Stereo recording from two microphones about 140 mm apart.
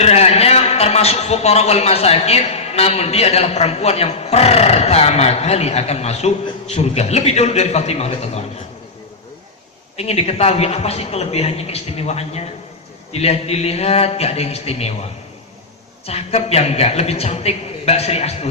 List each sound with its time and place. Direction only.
0.0 s a man's voice: 50° left (ahead or behind)
10.0 s a man's voice: 45° left (ahead or behind)
16.0 s a man's voice: 50° left (ahead or behind)